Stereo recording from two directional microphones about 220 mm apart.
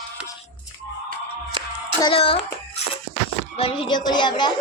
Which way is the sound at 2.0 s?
25° left (ahead or behind).